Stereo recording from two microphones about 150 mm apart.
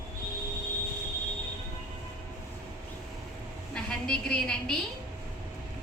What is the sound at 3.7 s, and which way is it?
A woman's voice, 5° left (ahead or behind).